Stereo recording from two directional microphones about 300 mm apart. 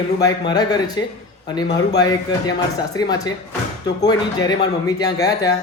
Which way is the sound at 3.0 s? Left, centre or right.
Centre.